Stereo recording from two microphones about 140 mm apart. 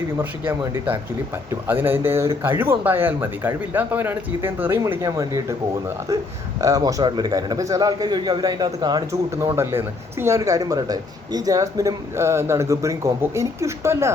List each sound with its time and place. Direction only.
1.6 s speech: 15° right (ahead or behind)
6.6 s speech: 25° right (ahead or behind)
9.3 s speech: 20° right (ahead or behind)